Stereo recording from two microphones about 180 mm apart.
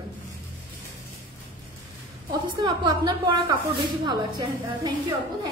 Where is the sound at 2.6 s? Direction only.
20° right (ahead or behind).